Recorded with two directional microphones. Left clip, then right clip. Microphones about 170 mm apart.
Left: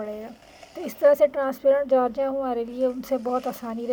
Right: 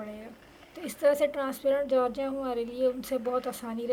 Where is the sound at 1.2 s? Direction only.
40° left (ahead or behind).